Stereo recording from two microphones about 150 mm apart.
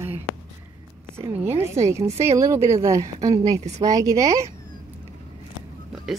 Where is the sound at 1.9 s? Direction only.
20° right (ahead or behind).